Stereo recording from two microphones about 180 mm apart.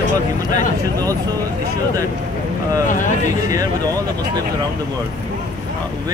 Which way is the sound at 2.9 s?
45° left (ahead or behind).